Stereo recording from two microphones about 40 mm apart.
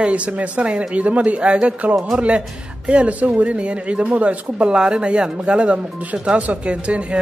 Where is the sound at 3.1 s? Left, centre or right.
Right.